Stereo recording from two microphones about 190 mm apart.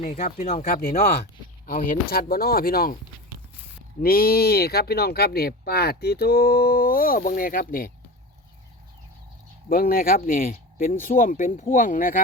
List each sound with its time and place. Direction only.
0.1 s speech: 50° left (ahead or behind)
4.0 s speech: 50° left (ahead or behind)
9.6 s speech: 50° left (ahead or behind)